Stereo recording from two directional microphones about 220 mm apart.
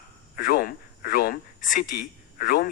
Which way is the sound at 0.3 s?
40° left (ahead or behind).